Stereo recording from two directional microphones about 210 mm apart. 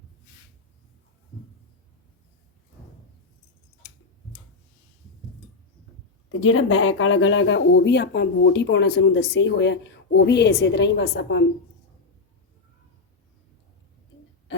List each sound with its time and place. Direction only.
6.2 s speech: 80° left; by 11.4 s 60° left (ahead or behind)